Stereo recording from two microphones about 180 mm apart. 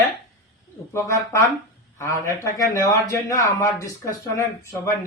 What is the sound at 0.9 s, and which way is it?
Speech, 15° left (ahead or behind).